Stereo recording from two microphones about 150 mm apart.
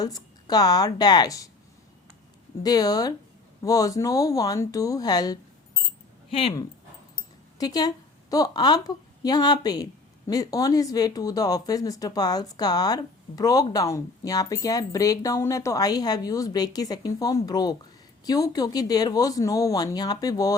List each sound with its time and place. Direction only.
0.0 s a woman's voice: 25° left (ahead or behind)
2.6 s a woman's voice: 25° left (ahead or behind)
7.6 s a woman's voice: 25° left (ahead or behind)